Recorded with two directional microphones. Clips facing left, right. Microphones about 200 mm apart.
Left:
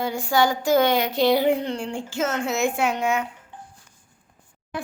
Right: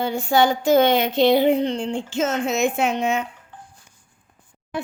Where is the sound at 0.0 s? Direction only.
25° right (ahead or behind).